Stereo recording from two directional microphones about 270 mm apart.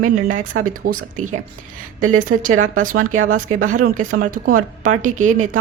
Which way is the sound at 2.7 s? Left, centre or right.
Right.